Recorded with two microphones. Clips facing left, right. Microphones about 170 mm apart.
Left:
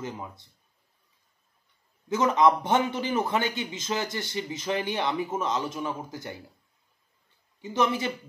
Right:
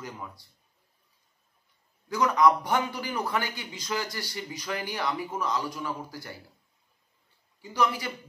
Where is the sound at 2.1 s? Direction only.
20° left (ahead or behind).